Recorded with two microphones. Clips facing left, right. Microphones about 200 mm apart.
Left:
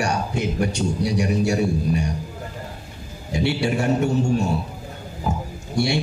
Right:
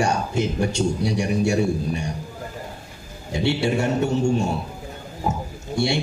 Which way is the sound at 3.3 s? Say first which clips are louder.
Even; 25° right (ahead or behind).